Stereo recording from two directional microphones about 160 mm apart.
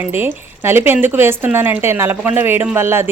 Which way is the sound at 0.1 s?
15° right (ahead or behind).